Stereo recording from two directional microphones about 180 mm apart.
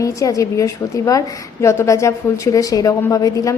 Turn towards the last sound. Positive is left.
turn(degrees=20)  # may be behind; listen again after turning